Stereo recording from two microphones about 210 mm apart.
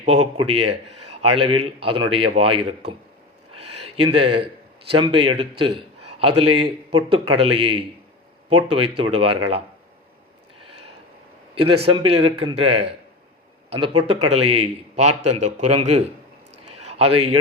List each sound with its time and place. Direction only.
0.0 s a man's voice: 25° right (ahead or behind)
3.5 s a sound: 30° right (ahead or behind)
4.0 s a man's voice: 25° right (ahead or behind)
11.5 s a man's voice: 25° right (ahead or behind)
14.3 s a man's voice: 90° right
14.5 s a man's voice: 30° right (ahead or behind)
16.7 s a sound: 30° right (ahead or behind)